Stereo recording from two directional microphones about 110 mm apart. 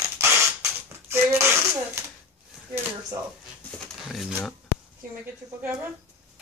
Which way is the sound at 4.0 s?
Centre (ahead or behind).